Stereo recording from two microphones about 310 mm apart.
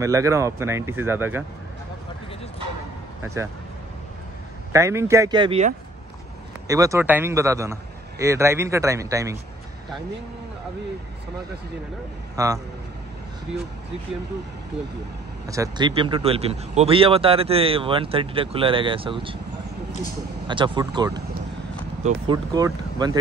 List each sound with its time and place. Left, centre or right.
0.0 s speech: centre
4.7 s speech: centre
6.7 s speech: centre
12.4 s speech: centre
15.4 s speech: centre
20.4 s speech: centre